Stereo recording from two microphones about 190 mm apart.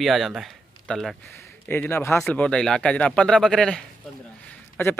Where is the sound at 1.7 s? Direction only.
15° left (ahead or behind).